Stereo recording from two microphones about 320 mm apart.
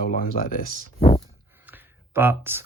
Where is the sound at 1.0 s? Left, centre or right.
Centre.